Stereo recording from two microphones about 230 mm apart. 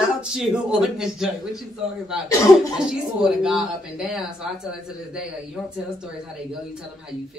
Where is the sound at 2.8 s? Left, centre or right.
Centre.